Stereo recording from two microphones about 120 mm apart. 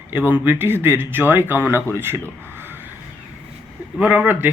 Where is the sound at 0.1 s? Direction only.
15° right (ahead or behind).